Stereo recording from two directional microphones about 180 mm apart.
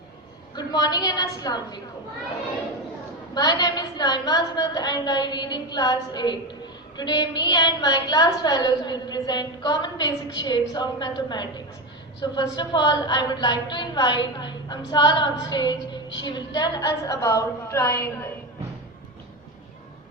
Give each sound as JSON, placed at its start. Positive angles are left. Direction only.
{"t": 0.5, "sound": "a woman's voice", "side_deg": 25}
{"t": 3.3, "sound": "a woman's voice", "side_deg": 20}